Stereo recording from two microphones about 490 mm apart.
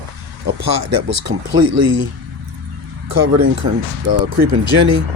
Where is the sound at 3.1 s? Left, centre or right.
Right.